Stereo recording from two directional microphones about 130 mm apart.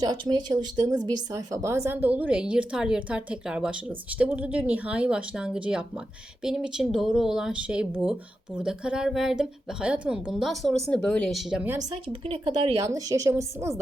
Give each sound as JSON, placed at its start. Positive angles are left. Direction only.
{"t": 0.0, "sound": "a woman's voice", "side_deg": -35}
{"t": 11.8, "sound": "speech", "side_deg": -55}
{"t": 12.8, "sound": "a woman's voice", "side_deg": -25}